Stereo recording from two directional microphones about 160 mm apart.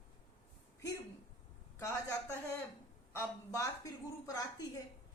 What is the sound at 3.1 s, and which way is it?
Speech, 15° left (ahead or behind).